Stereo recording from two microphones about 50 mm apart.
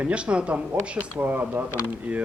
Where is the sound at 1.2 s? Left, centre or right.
Right.